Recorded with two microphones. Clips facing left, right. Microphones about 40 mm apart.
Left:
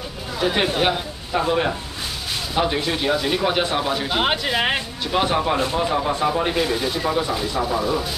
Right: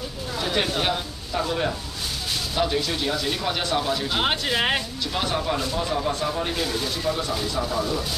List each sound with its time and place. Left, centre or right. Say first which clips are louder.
0.4 s speech: left 5 dB; centre
5.1 s speech: left 6 dB; left